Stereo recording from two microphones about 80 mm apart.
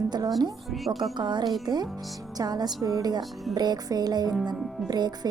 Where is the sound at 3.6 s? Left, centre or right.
Right.